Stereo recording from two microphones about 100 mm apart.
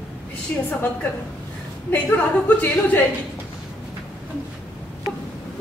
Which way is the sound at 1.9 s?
20° left (ahead or behind).